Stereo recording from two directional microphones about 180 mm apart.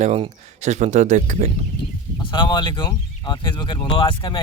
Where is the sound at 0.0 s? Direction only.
35° right (ahead or behind).